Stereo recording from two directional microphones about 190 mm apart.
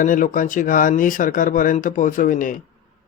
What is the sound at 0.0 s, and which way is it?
Speech, 45° left (ahead or behind).